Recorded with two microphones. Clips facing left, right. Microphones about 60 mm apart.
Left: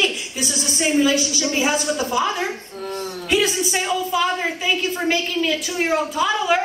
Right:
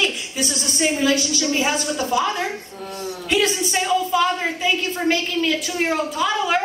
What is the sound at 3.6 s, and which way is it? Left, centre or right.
A woman's voice, centre.